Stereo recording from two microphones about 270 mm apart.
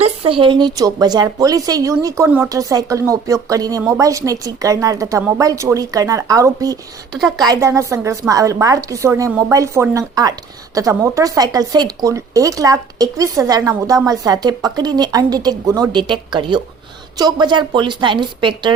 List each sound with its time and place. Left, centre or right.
0.0 s speech: right
7.1 s a woman's voice: centre
7.4 s speech: centre